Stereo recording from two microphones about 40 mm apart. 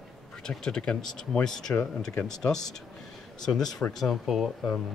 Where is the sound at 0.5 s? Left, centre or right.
Centre.